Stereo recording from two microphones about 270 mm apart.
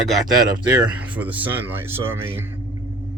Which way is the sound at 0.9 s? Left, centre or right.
Centre.